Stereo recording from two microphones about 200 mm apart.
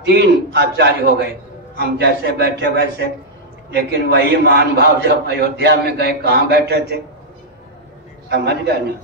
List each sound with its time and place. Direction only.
0.0 s a man's voice: 55° right (ahead or behind)
8.3 s a man's voice: 55° right (ahead or behind)